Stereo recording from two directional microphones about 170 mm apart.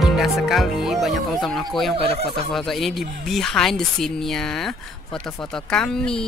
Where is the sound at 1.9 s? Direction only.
35° right (ahead or behind).